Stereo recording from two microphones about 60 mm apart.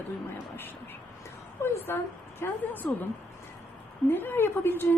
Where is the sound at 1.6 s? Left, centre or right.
Left.